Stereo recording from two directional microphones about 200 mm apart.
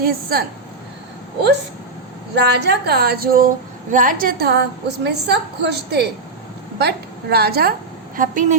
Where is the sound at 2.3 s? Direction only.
55° right (ahead or behind).